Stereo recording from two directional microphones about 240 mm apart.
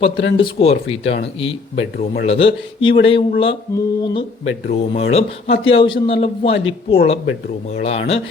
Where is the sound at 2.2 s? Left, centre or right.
Left.